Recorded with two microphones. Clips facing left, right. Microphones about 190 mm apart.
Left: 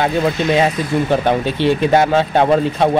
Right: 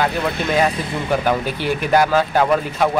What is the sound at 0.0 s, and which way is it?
Speech, 25° left (ahead or behind).